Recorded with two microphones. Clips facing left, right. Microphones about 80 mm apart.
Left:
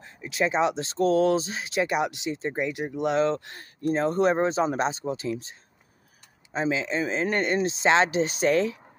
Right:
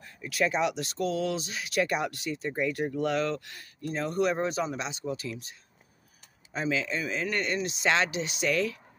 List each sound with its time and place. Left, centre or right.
0.0 s speech: left